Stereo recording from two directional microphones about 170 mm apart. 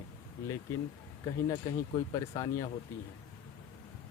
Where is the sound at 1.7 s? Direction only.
20° left (ahead or behind).